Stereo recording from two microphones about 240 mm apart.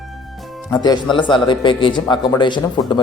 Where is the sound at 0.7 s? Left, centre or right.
Centre.